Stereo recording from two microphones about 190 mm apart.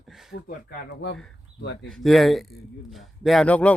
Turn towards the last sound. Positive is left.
turn(degrees=5)  # may be behind; listen again after turning